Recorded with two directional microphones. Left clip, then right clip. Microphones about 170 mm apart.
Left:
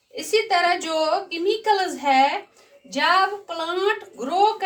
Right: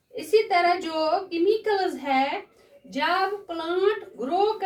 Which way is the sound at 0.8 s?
35° right (ahead or behind).